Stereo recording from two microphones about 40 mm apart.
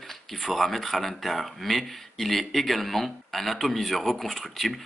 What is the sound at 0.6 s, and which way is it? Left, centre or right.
Speech, centre.